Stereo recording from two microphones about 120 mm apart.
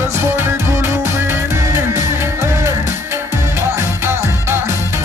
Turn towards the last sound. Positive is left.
turn(degrees=-20)  # may be behind; listen again after turning